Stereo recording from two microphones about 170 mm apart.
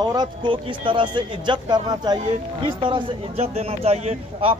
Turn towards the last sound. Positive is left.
turn(degrees=-35)  # may be behind; listen again after turning